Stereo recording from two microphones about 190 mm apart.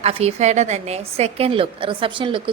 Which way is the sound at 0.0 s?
35° right (ahead or behind).